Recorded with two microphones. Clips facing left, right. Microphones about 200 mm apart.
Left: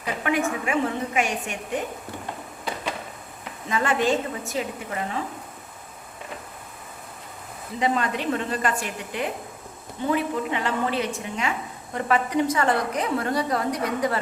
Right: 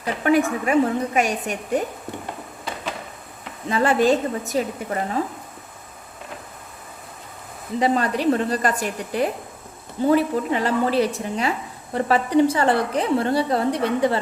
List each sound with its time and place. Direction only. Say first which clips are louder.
0.0 s a woman's voice: right 6 dB; 35° right (ahead or behind)
3.7 s a woman's voice: right 5 dB; 35° right (ahead or behind)
7.8 s a woman's voice: right 4 dB; 35° right (ahead or behind)